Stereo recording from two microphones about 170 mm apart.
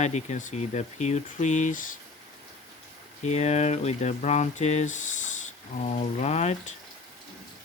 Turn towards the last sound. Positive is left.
turn(degrees=40)  # may be behind; listen again after turning